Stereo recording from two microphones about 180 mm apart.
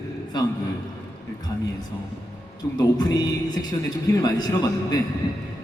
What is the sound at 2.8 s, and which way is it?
Music, 25° left (ahead or behind).